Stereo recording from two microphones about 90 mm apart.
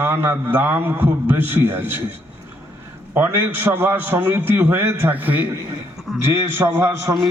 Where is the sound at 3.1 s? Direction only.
25° right (ahead or behind).